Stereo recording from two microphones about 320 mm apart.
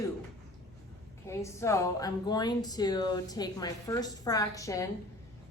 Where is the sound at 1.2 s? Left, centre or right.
Centre.